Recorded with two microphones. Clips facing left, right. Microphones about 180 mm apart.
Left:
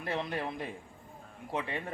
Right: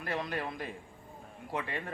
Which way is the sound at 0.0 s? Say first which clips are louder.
Left 1 dB; 25° left (ahead or behind).